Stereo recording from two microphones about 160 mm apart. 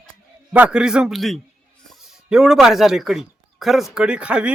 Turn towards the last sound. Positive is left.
turn(degrees=-5)  # may be behind; listen again after turning